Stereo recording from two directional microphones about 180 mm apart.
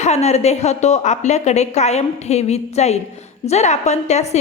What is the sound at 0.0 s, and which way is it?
A woman's voice, 35° left (ahead or behind).